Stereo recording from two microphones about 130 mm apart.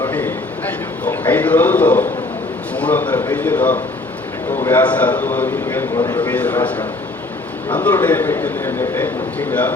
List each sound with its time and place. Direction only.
0.1 s a sound: 15° left (ahead or behind)
1.0 s a man's voice: 15° left (ahead or behind)
6.0 s speech: 30° left (ahead or behind)
6.2 s a man's voice: 10° left (ahead or behind)